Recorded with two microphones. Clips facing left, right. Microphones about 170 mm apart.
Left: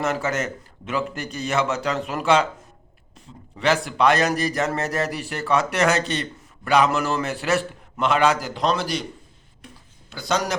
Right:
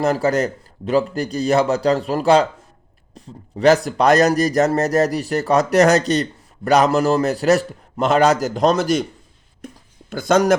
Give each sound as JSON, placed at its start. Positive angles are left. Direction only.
{"t": 0.0, "sound": "speech", "side_deg": -35}
{"t": 9.6, "sound": "a sound", "side_deg": -45}
{"t": 10.1, "sound": "speech", "side_deg": -50}